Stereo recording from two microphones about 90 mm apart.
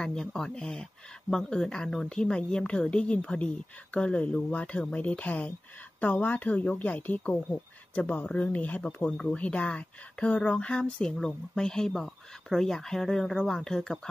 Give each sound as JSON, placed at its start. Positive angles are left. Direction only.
{"t": 0.0, "sound": "speech", "side_deg": 5}